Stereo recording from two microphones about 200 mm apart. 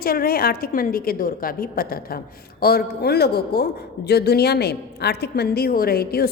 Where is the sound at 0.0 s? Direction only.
50° left (ahead or behind).